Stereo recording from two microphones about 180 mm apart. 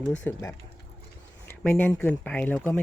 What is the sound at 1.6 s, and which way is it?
Speech, 10° left (ahead or behind).